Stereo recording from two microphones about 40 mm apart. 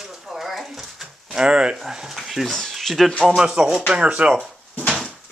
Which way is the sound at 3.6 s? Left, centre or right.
Right.